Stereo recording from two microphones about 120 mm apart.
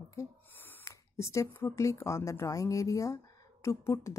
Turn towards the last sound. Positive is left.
turn(degrees=25)  # may be behind; listen again after turning